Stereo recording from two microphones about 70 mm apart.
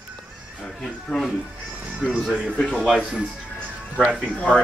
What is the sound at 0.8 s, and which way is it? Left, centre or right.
Speech, centre.